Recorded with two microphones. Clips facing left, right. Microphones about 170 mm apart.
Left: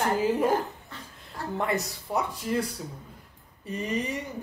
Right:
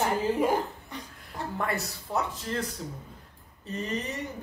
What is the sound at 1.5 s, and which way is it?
Speech, 20° left (ahead or behind).